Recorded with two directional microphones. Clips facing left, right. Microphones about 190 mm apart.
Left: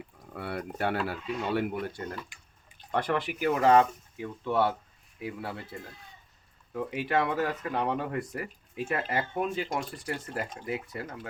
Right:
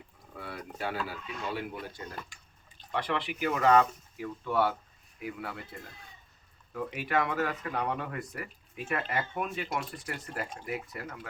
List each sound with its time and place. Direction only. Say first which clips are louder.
0.3 s speech: left 6 dB; 65° left (ahead or behind)
2.9 s speech: left 4 dB; 45° left (ahead or behind); by 5.5 s 30° left (ahead or behind)
6.7 s speech: left 2 dB; 30° left (ahead or behind)